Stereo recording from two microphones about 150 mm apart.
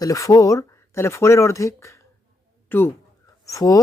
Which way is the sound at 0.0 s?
20° left (ahead or behind).